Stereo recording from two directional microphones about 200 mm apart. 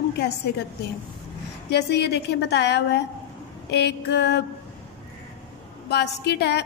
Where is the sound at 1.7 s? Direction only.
55° left (ahead or behind).